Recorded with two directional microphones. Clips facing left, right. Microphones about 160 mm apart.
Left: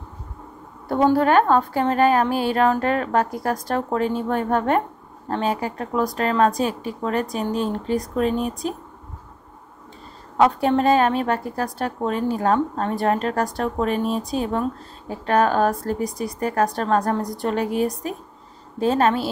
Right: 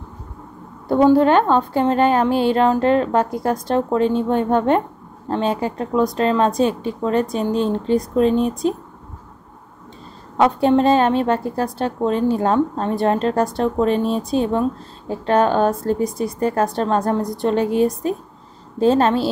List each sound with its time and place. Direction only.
0.8 s a woman's voice: 25° right (ahead or behind)
10.3 s a woman's voice: 25° right (ahead or behind)